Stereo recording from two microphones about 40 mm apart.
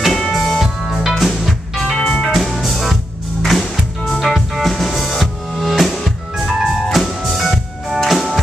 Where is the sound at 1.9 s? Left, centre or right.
Left.